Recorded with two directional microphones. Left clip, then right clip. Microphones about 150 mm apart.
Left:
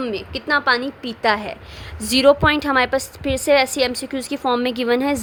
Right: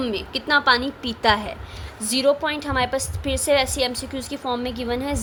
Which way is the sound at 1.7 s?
45° left (ahead or behind).